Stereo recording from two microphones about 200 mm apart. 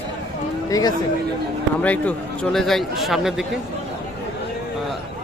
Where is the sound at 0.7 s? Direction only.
20° left (ahead or behind).